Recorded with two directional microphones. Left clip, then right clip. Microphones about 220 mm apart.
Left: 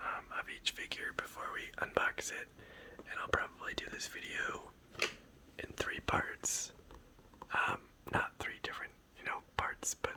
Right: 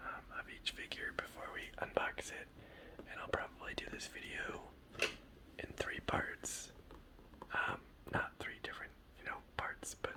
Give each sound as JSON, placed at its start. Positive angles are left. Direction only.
{"t": 0.0, "sound": "whispering", "side_deg": 30}
{"t": 5.5, "sound": "speech", "side_deg": 20}
{"t": 7.4, "sound": "whispering", "side_deg": 20}